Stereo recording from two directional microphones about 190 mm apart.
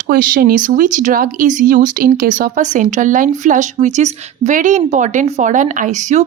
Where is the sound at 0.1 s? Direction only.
50° right (ahead or behind).